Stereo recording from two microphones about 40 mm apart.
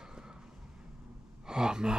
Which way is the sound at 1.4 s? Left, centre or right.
Centre.